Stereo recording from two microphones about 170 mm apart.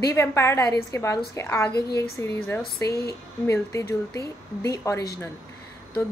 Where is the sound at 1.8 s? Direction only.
70° left (ahead or behind).